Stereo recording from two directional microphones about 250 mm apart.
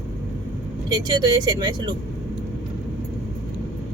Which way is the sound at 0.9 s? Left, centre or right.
Centre.